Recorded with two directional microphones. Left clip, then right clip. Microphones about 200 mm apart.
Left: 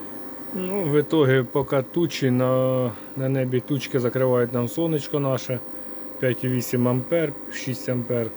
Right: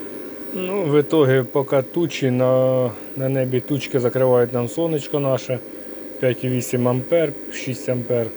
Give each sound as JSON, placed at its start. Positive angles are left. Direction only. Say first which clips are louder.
{"t": 0.6, "sound": "speech", "louder": "right 4 dB", "side_deg": 10}